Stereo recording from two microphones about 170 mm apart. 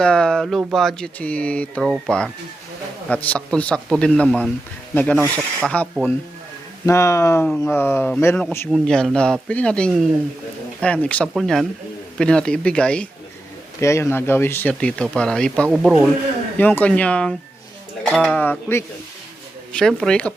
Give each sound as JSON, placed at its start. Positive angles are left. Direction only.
{"t": 0.0, "sound": "speech", "side_deg": 5}
{"t": 15.7, "sound": "speech", "side_deg": -5}
{"t": 16.6, "sound": "speech", "side_deg": 10}
{"t": 19.7, "sound": "speech", "side_deg": 0}